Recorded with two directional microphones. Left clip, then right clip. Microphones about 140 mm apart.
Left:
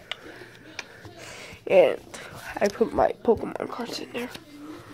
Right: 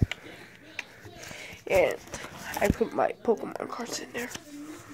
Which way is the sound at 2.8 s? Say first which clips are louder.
Left 4 dB; 10° left (ahead or behind).